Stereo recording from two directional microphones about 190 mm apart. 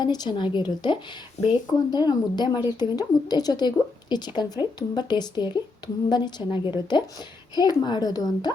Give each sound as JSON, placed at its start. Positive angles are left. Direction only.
{"t": 0.0, "sound": "speech", "side_deg": 20}